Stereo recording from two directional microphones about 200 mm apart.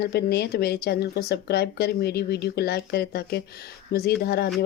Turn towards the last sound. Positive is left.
turn(degrees=55)  # may be behind; listen again after turning